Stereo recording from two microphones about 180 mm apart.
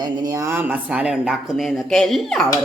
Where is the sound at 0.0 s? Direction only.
20° right (ahead or behind).